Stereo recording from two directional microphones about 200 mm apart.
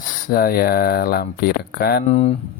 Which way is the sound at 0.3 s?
45° left (ahead or behind).